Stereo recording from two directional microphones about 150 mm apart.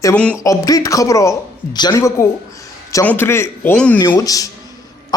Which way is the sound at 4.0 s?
25° left (ahead or behind).